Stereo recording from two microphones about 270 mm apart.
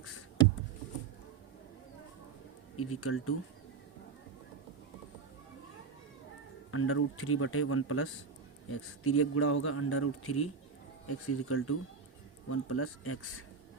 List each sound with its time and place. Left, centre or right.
2.7 s speech: left
6.7 s speech: left